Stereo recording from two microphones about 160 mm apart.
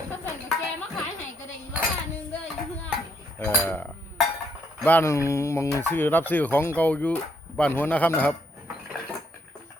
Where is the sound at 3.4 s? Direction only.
10° left (ahead or behind).